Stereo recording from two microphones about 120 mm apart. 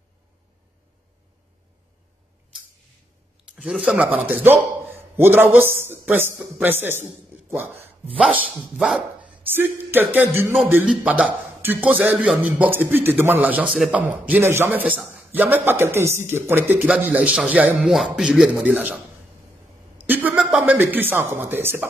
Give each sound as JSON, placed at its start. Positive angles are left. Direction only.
{"t": 3.4, "sound": "a man's voice", "side_deg": -10}
{"t": 7.7, "sound": "speech", "side_deg": -55}
{"t": 8.2, "sound": "a man's voice", "side_deg": -10}
{"t": 9.2, "sound": "a man's voice", "side_deg": -15}
{"t": 20.1, "sound": "a man's voice", "side_deg": -15}